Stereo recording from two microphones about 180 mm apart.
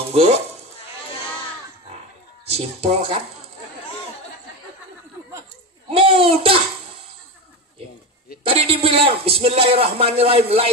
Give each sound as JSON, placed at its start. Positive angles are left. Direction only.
{"t": 0.0, "sound": "sizzle", "side_deg": -35}
{"t": 2.5, "sound": "a man's voice", "side_deg": -35}
{"t": 5.9, "sound": "a child's voice", "side_deg": -30}
{"t": 8.5, "sound": "a man's voice", "side_deg": -30}